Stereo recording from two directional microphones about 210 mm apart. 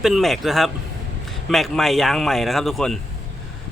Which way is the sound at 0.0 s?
Centre (ahead or behind).